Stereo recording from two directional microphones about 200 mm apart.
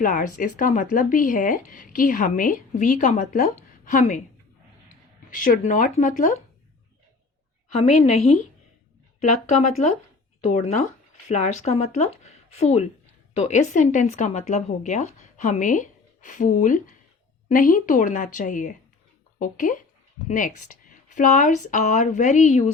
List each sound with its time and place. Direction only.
0.0 s speech: 40° left (ahead or behind)
7.7 s speech: 35° left (ahead or behind)
9.5 s speech: 35° left (ahead or behind)